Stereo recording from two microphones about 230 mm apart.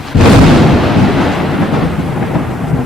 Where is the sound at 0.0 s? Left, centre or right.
Centre.